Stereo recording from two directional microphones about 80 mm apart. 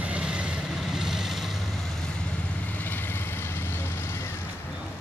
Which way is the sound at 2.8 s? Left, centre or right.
Left.